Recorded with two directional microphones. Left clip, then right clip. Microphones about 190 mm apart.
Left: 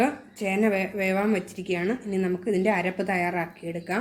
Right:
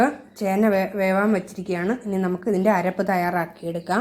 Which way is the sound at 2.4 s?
Centre (ahead or behind).